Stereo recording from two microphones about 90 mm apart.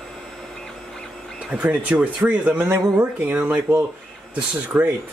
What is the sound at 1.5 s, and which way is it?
Speech, 15° right (ahead or behind).